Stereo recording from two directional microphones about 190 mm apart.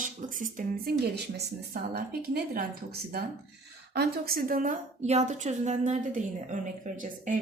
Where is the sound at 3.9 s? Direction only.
55° right (ahead or behind).